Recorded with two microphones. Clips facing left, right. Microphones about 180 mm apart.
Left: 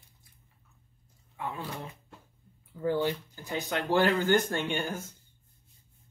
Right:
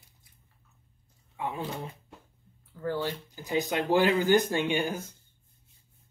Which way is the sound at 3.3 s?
15° right (ahead or behind).